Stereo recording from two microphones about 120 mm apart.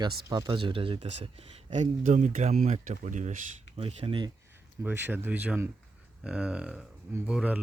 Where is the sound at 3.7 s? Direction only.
50° right (ahead or behind).